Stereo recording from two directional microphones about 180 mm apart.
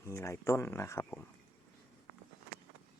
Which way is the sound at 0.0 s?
15° left (ahead or behind).